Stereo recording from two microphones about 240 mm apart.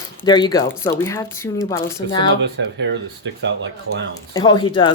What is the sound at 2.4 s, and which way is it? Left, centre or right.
Speech, right.